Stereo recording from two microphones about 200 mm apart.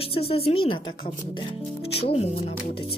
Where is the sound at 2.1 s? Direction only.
30° left (ahead or behind).